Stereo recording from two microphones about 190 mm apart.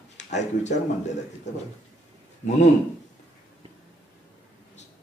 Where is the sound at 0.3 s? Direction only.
40° left (ahead or behind).